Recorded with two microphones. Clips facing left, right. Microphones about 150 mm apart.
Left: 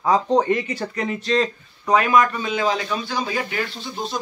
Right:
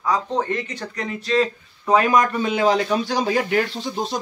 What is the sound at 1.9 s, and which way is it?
A man's voice, 35° right (ahead or behind).